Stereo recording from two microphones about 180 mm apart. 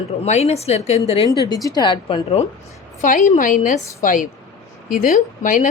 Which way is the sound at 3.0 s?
45° left (ahead or behind).